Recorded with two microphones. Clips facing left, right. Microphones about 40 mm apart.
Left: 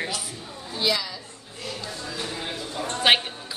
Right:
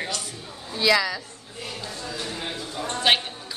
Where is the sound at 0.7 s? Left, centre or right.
Right.